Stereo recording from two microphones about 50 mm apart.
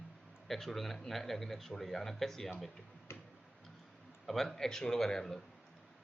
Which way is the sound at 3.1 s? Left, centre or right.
Left.